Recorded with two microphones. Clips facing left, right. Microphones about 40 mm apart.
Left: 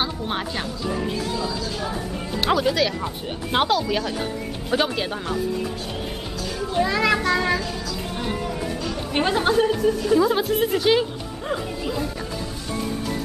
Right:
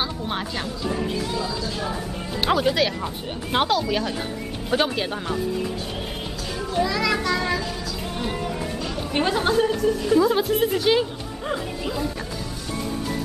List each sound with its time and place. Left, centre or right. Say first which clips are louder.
0.0 s a woman's voice: left 1 dB; centre
3.5 s a woman's voice: left 1 dB; centre
6.7 s speech: left 2 dB; left
7.2 s speech: left 2 dB; centre
8.2 s music: even; centre
9.1 s a woman's voice: left 1 dB; centre